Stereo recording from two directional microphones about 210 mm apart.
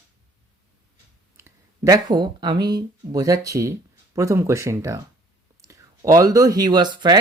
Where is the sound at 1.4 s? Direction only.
15° right (ahead or behind).